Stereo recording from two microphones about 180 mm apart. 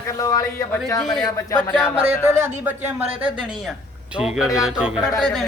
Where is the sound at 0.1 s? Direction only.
20° left (ahead or behind).